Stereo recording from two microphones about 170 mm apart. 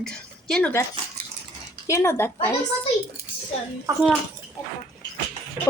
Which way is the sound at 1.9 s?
15° left (ahead or behind).